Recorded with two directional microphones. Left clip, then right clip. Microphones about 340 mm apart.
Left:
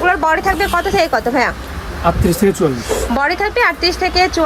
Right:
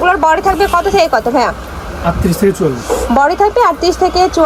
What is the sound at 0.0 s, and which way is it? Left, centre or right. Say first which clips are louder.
Speech: right 4 dB; centre.